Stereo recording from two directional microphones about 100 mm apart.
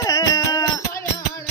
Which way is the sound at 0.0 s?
35° left (ahead or behind).